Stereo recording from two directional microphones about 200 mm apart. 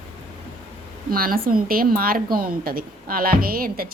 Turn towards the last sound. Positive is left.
turn(degrees=-45)  # may be behind; listen again after turning